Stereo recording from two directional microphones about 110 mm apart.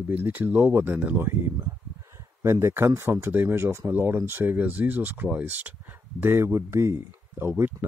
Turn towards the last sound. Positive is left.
turn(degrees=-20)  # may be behind; listen again after turning